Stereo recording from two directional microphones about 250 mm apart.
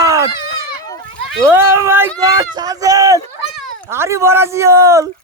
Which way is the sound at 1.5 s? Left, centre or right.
Centre.